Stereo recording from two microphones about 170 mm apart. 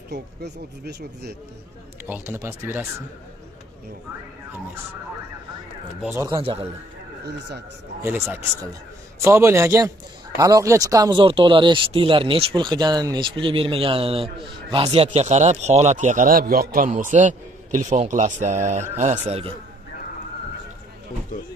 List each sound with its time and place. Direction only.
0.1 s speech: 75° right (ahead or behind)
2.0 s speech: 15° right (ahead or behind)
6.1 s speech: 15° right (ahead or behind)
7.2 s speech: 80° right
8.0 s a man's voice: 10° right (ahead or behind); by 19.5 s 40° right (ahead or behind)